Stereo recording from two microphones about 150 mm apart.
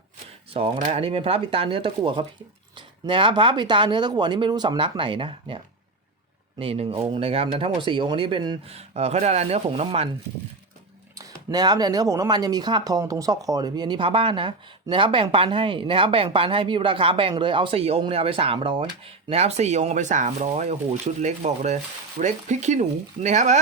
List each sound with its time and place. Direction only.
0.5 s speech: 40° right (ahead or behind)
8.9 s speech: 45° right (ahead or behind)
11.2 s speech: 25° right (ahead or behind); by 23.6 s 50° right (ahead or behind)